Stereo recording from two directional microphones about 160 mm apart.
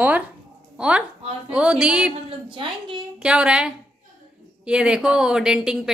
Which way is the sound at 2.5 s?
30° right (ahead or behind).